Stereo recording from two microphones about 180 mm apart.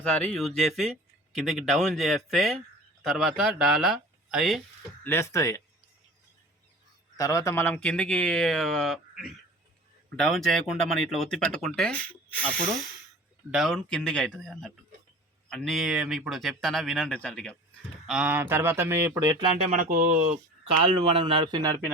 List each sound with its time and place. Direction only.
0.0 s speech: 5° left (ahead or behind)
5.0 s speech: 15° left (ahead or behind)
7.2 s speech: 20° left (ahead or behind); by 19.5 s 20° right (ahead or behind)
19.7 s speech: 45° right (ahead or behind)
21.0 s a man's voice: 30° right (ahead or behind)